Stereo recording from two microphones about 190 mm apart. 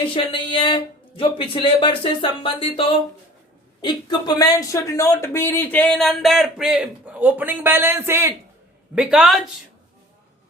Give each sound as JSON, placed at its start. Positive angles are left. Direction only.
{"t": 0.1, "sound": "speech", "side_deg": 25}